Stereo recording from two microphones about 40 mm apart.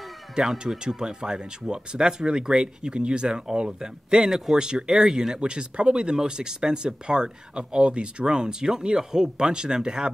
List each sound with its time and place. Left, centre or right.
0.4 s speech: right